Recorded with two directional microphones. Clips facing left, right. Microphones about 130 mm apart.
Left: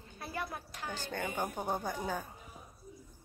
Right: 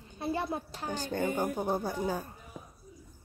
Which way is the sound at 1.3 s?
10° right (ahead or behind).